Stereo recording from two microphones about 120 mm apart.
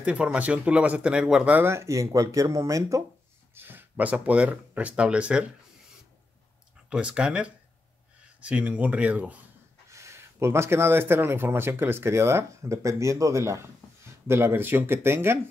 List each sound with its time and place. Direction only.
0.0 s speech: 10° right (ahead or behind); by 3.0 s 25° right (ahead or behind)
3.5 s speech: 15° right (ahead or behind)
6.9 s speech: 10° right (ahead or behind)
9.8 s speech: 25° right (ahead or behind)